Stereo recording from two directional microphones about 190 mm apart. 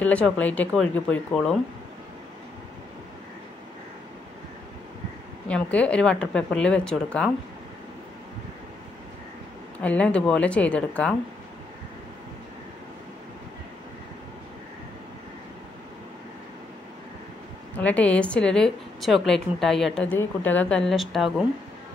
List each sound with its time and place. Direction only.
0.0 s speech: 5° left (ahead or behind)
5.5 s a woman's voice: 5° left (ahead or behind)
9.8 s speech: 5° left (ahead or behind)
17.7 s a woman's voice: 5° left (ahead or behind)